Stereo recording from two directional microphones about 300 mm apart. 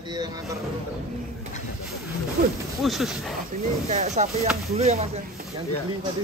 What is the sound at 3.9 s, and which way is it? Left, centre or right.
Speech, right.